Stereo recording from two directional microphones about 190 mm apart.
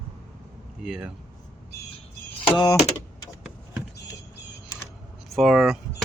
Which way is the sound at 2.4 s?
25° left (ahead or behind).